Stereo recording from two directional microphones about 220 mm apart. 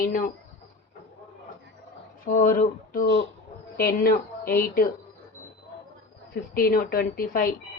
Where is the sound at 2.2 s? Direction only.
40° left (ahead or behind).